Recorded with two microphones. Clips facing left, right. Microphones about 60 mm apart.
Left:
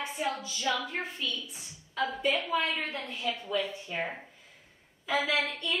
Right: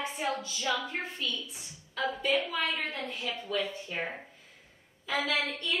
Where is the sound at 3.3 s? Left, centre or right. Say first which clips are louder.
Even; centre.